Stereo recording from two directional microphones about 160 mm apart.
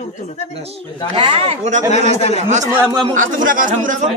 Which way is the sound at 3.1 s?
55° right (ahead or behind).